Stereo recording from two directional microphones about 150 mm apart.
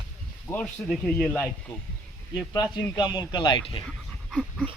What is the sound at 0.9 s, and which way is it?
Speech, 5° left (ahead or behind).